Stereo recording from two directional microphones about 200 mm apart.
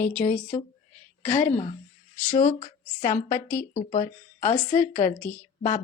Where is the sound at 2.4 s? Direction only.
35° left (ahead or behind).